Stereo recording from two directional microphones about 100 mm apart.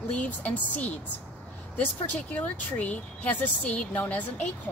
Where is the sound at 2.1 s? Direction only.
15° left (ahead or behind).